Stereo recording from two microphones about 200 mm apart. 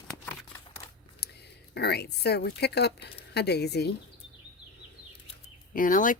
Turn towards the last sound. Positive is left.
turn(degrees=40)  # may be behind; listen again after turning